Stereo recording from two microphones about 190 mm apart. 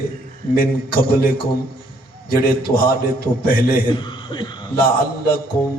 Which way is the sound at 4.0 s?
25° left (ahead or behind).